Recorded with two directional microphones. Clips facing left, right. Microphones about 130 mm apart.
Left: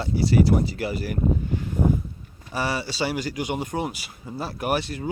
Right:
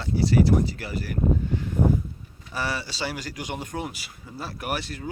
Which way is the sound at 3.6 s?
20° left (ahead or behind).